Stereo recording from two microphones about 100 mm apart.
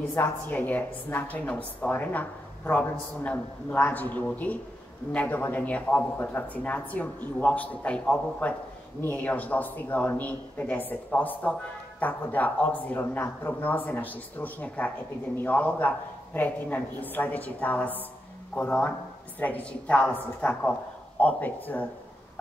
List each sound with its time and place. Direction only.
0.1 s a woman's voice: 20° left (ahead or behind)